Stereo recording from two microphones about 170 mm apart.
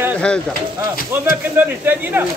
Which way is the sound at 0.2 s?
5° left (ahead or behind).